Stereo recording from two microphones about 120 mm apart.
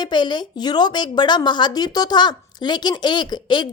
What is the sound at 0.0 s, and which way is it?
A woman's voice, 40° left (ahead or behind).